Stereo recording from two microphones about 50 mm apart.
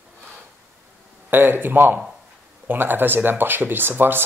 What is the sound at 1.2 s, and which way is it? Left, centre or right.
Speech, right.